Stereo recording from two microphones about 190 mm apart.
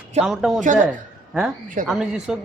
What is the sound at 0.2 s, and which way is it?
Speech, centre (ahead or behind).